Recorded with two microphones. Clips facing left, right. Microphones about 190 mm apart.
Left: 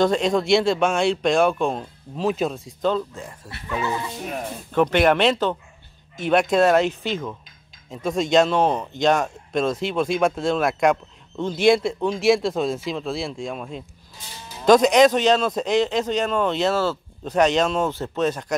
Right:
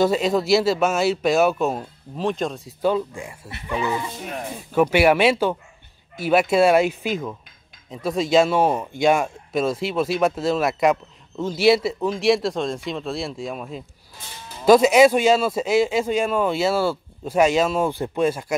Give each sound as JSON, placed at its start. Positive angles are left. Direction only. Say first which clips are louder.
{"t": 0.0, "sound": "speech", "louder": "even", "side_deg": -5}
{"t": 3.4, "sound": "speech", "louder": "right 1 dB", "side_deg": -20}
{"t": 4.2, "sound": "speech", "louder": "left 1 dB", "side_deg": 0}